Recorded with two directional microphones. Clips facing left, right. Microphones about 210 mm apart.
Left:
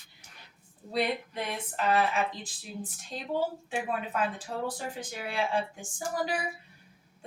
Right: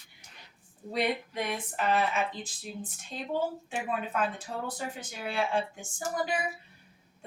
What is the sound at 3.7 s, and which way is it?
A woman's voice, centre (ahead or behind).